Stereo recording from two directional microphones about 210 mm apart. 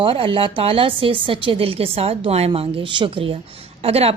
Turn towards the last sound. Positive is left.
turn(degrees=-30)  # may be behind; listen again after turning